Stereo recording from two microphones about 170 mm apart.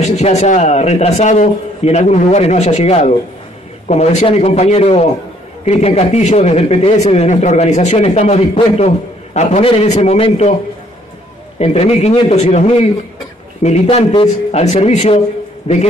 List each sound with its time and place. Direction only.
0.0 s a man's voice: 40° left (ahead or behind)
11.5 s a man's voice: 40° left (ahead or behind)